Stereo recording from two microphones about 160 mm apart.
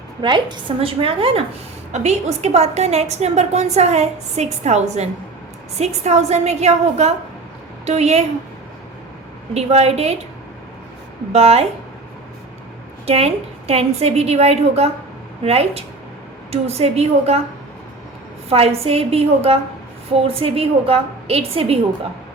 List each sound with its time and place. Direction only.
0.2 s a woman's voice: 30° right (ahead or behind)
9.6 s a woman's voice: 40° right (ahead or behind)
11.3 s a woman's voice: 40° right (ahead or behind)
13.1 s a woman's voice: 40° right (ahead or behind)
18.4 s a woman's voice: 40° right (ahead or behind)